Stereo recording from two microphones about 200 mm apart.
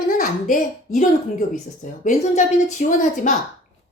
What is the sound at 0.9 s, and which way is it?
Speech, 40° left (ahead or behind).